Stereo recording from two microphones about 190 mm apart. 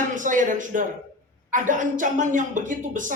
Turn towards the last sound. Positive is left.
turn(degrees=-45)  # may be behind; listen again after turning